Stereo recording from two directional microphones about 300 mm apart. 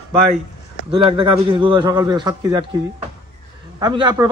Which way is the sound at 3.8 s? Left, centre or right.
Centre.